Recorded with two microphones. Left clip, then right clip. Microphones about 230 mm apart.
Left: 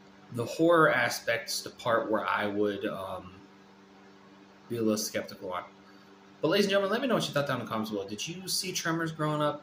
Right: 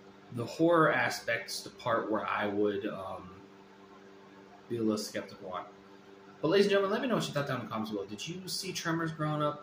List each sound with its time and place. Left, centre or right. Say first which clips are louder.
0.5 s speech: left 3 dB; centre
4.8 s speech: left 4 dB; centre